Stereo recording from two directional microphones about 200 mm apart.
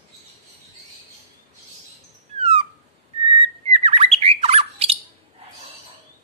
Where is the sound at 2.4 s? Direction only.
30° right (ahead or behind).